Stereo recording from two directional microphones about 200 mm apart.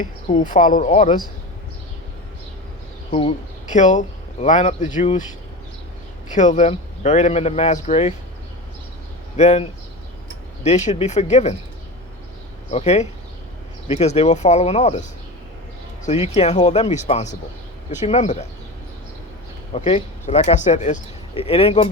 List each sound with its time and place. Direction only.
0.4 s speech: 40° left (ahead or behind)
3.1 s speech: 35° left (ahead or behind)
6.3 s speech: 35° left (ahead or behind)
9.3 s speech: 35° left (ahead or behind)
12.7 s speech: 35° left (ahead or behind)
16.3 s speech: 35° left (ahead or behind)
19.7 s speech: 30° left (ahead or behind)